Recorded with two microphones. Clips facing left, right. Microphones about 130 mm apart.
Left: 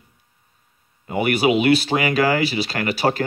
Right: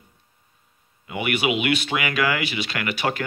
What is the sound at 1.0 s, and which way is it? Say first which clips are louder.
Speech: left 6 dB; 40° left (ahead or behind).